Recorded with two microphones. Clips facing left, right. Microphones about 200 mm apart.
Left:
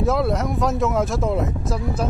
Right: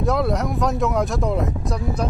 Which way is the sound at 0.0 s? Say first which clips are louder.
Even; centre (ahead or behind).